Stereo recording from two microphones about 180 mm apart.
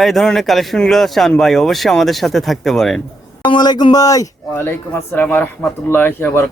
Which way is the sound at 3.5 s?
25° left (ahead or behind).